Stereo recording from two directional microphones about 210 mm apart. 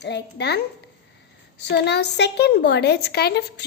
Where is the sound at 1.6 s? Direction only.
55° left (ahead or behind).